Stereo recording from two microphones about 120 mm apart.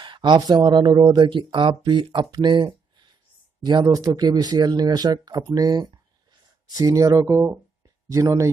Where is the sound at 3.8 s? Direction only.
30° right (ahead or behind).